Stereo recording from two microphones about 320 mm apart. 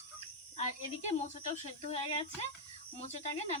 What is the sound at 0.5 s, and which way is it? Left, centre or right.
Speech, left.